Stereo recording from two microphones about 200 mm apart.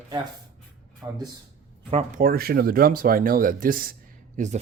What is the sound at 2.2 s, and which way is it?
Speech, 50° right (ahead or behind).